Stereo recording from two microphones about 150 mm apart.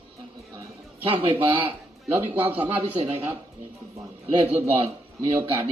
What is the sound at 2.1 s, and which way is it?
Speech, 15° right (ahead or behind).